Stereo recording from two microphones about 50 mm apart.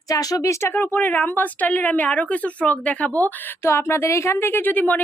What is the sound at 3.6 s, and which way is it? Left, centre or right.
A woman's voice, left.